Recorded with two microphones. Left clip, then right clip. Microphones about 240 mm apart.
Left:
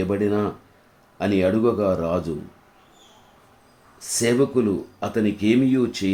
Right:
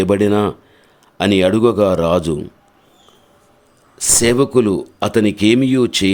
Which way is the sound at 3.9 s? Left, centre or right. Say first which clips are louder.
Right 7 dB; right.